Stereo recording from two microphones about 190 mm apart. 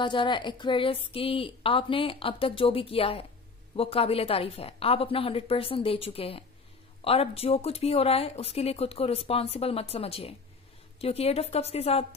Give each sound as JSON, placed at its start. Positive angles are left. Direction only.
{"t": 0.0, "sound": "speech", "side_deg": 25}